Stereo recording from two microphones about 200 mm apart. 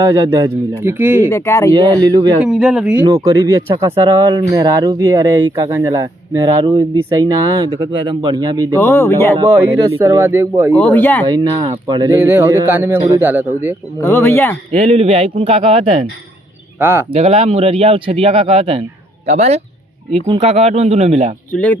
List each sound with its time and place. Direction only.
0.0 s speech: 15° right (ahead or behind)
1.3 s speech: 15° left (ahead or behind)
2.0 s speech: 20° right (ahead or behind)
2.4 s speech: 5° right (ahead or behind)
3.1 s speech: 15° right (ahead or behind)
8.8 s speech: 10° left (ahead or behind)
10.0 s speech: 15° right (ahead or behind)
10.8 s speech: 5° left (ahead or behind)
11.3 s speech: 20° right (ahead or behind)
14.0 s speech: 10° left (ahead or behind)
14.7 s speech: 30° right (ahead or behind)
16.8 s speech: 10° right (ahead or behind)
17.1 s speech: 30° right (ahead or behind)